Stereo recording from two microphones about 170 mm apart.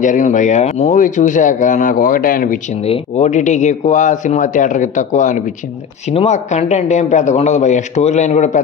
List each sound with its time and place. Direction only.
0.0 s speech: 45° left (ahead or behind)
2.8 s speech: 40° left (ahead or behind)